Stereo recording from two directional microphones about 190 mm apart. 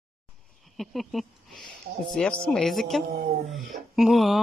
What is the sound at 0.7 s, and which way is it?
Speech, centre (ahead or behind).